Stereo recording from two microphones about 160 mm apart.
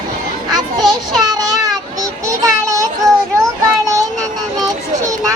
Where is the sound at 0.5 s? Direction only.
25° right (ahead or behind).